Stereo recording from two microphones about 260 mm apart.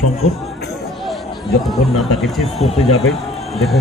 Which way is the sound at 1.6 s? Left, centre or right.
Centre.